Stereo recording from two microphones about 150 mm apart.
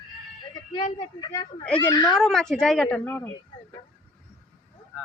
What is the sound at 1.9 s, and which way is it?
Speech, 25° left (ahead or behind).